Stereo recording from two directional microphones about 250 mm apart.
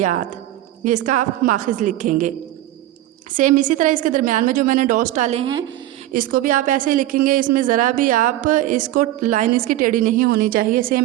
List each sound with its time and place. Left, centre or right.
0.0 s a woman's voice: right
3.3 s a woman's voice: right
6.1 s a woman's voice: right